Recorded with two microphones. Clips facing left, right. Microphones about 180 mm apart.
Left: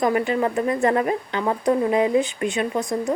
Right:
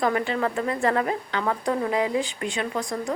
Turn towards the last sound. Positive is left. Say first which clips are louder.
# left 5 dB
turn(degrees=20)  # may be behind; listen again after turning